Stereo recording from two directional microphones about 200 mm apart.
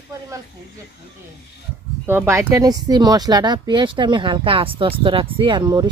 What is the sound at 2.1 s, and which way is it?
Speech, 10° right (ahead or behind).